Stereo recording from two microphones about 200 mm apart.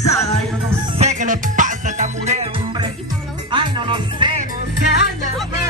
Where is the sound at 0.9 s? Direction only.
35° right (ahead or behind).